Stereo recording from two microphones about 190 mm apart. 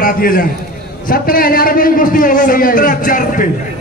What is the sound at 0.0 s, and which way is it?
A man's voice, 50° left (ahead or behind).